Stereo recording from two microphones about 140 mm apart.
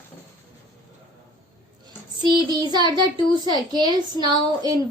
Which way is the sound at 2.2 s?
35° right (ahead or behind).